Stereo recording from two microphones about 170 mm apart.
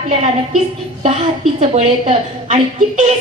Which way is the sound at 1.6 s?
40° right (ahead or behind).